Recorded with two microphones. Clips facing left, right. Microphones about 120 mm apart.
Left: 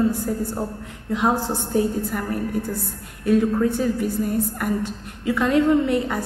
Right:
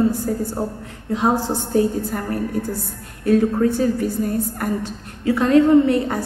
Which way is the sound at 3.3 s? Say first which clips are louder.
Right 2 dB; 35° right (ahead or behind).